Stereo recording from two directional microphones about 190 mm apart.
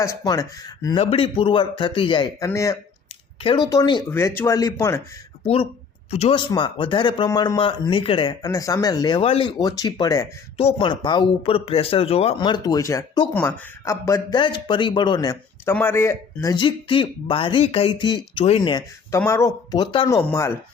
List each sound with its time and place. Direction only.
0.0 s speech: 15° left (ahead or behind)
0.9 s speech: 30° left (ahead or behind)
2.5 s speech: 15° left (ahead or behind)
6.1 s speech: 35° left (ahead or behind); by 20.6 s 15° left (ahead or behind)